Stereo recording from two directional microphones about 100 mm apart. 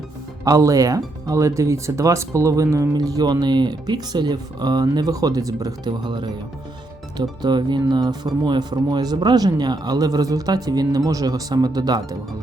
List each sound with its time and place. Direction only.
0.4 s speech: 35° right (ahead or behind)
6.1 s speech: 50° right (ahead or behind)